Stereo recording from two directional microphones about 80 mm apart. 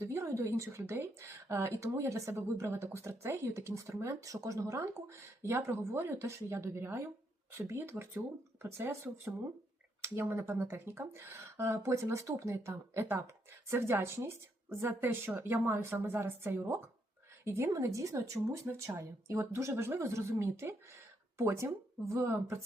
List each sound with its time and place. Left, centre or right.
0.0 s a woman's voice: right
19.4 s a woman's voice: right